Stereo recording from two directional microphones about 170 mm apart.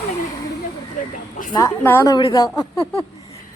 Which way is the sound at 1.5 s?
20° left (ahead or behind).